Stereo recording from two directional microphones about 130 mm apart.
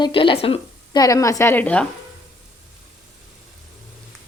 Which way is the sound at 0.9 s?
30° left (ahead or behind).